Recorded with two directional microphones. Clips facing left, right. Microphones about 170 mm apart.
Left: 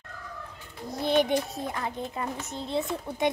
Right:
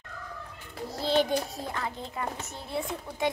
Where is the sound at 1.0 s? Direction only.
20° left (ahead or behind).